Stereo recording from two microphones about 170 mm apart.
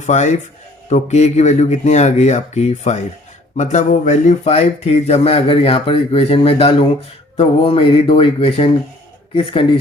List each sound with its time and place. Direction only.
0.0 s speech: 45° left (ahead or behind)